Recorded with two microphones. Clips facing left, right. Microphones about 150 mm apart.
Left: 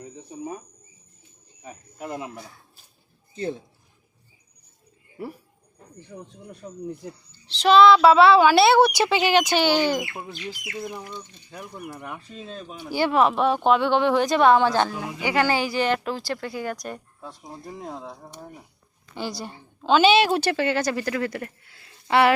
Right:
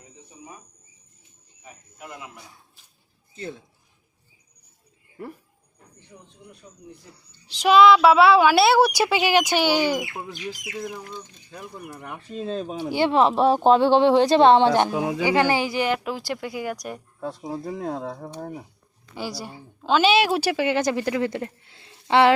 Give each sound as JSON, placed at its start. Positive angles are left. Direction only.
{"t": 0.0, "sound": "a sound", "side_deg": 45}
{"t": 1.6, "sound": "cricket", "side_deg": 35}
{"t": 3.3, "sound": "speech", "side_deg": 35}
{"t": 5.2, "sound": "speech", "side_deg": 5}
{"t": 6.1, "sound": "speech", "side_deg": 55}
{"t": 7.4, "sound": "speech", "side_deg": -10}
{"t": 12.1, "sound": "speech", "side_deg": -30}
{"t": 17.2, "sound": "speech", "side_deg": -70}
{"t": 19.1, "sound": "speech", "side_deg": -10}